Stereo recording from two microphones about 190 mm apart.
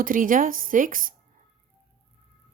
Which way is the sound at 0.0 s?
45° right (ahead or behind).